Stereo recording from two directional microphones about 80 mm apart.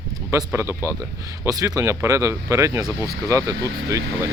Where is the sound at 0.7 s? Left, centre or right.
Left.